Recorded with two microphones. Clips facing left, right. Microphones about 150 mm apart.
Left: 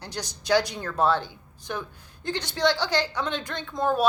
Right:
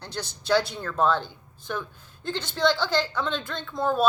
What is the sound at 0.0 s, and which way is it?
A woman's voice, 15° left (ahead or behind).